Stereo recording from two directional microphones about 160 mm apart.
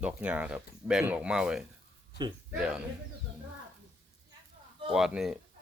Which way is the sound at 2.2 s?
25° right (ahead or behind).